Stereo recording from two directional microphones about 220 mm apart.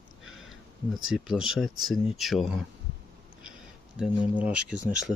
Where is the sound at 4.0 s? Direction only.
5° right (ahead or behind).